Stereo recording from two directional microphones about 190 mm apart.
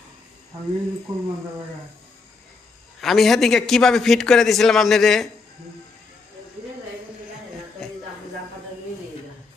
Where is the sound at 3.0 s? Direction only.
Centre (ahead or behind).